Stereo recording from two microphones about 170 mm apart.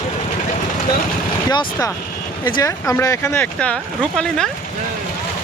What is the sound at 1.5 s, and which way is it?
Speech, 25° left (ahead or behind).